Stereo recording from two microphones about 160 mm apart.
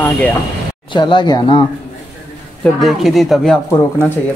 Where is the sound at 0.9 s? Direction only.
30° left (ahead or behind).